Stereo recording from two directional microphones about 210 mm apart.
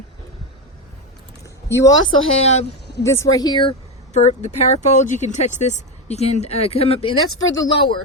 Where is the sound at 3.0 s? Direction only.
15° left (ahead or behind).